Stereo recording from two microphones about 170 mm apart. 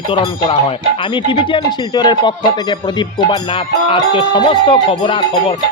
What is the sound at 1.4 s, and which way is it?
Speech, 30° left (ahead or behind).